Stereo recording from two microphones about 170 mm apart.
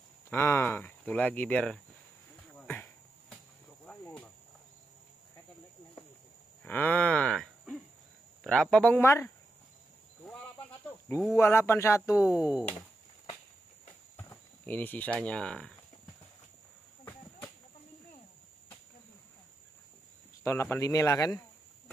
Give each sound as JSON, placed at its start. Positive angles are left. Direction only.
{"t": 0.3, "sound": "speech", "side_deg": 15}
{"t": 2.6, "sound": "insect", "side_deg": 10}
{"t": 3.8, "sound": "cricket", "side_deg": 10}
{"t": 6.6, "sound": "cattle", "side_deg": 10}
{"t": 8.5, "sound": "speech", "side_deg": 5}
{"t": 10.2, "sound": "a sound", "side_deg": 10}
{"t": 11.3, "sound": "speech", "side_deg": 15}
{"t": 12.2, "sound": "speech", "side_deg": -5}
{"t": 14.1, "sound": "speech", "side_deg": 10}
{"t": 20.8, "sound": "cricket", "side_deg": 20}